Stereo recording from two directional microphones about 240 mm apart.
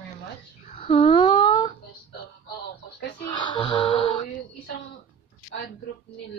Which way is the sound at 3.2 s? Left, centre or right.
Centre.